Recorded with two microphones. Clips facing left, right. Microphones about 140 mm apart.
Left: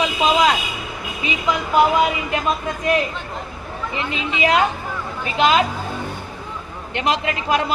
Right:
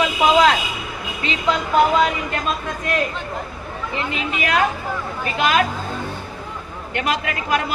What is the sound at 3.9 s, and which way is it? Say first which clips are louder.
Speech: left 1 dB; 20° left (ahead or behind).